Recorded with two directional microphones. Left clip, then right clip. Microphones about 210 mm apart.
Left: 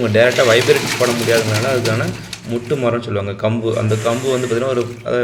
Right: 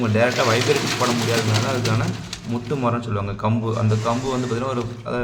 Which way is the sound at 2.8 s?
Centre (ahead or behind).